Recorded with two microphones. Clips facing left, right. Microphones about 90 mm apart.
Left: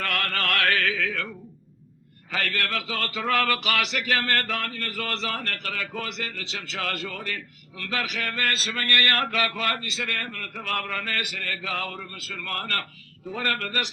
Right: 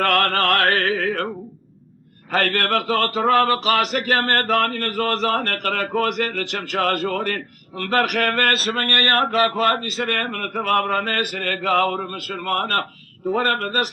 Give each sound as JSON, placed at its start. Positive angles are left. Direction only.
{"t": 0.0, "sound": "speech", "side_deg": -55}